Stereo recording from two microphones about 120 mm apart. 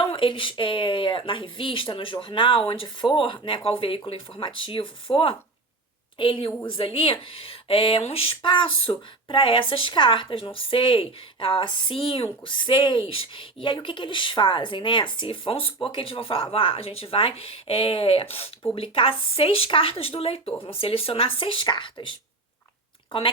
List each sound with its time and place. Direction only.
0.0 s speech: 50° left (ahead or behind)
23.1 s speech: 45° left (ahead or behind)